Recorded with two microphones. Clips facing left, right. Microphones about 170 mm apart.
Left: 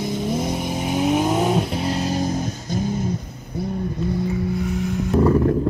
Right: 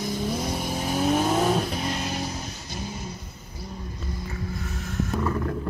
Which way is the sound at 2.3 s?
50° left (ahead or behind).